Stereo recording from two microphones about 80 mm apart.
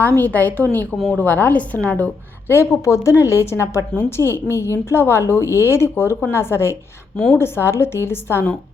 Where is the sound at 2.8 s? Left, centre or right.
Left.